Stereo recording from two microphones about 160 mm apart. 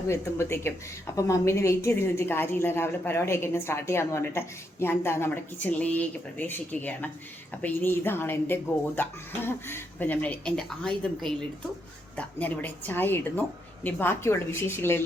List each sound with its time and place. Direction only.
0.1 s a woman's voice: 15° left (ahead or behind)